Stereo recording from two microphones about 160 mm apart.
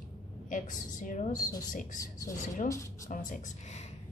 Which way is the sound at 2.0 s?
20° left (ahead or behind).